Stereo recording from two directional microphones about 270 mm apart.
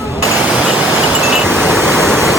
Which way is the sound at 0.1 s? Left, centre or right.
Centre.